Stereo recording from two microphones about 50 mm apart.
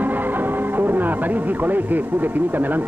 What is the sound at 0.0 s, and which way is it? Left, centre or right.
Speech, right.